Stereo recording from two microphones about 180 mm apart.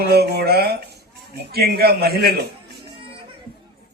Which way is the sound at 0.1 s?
60° right (ahead or behind).